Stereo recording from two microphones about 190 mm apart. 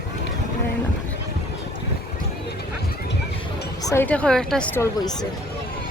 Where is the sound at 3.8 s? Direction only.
10° left (ahead or behind).